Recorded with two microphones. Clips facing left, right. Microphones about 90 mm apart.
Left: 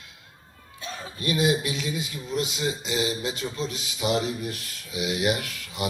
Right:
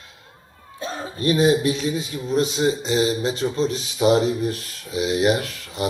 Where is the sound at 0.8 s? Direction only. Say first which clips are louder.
Right 8 dB; 35° right (ahead or behind).